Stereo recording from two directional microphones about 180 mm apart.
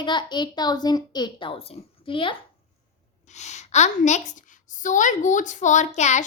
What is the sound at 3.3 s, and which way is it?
A woman's voice, 40° left (ahead or behind).